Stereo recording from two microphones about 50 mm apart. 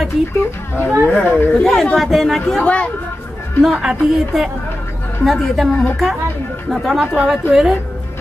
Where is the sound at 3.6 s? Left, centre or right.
Centre.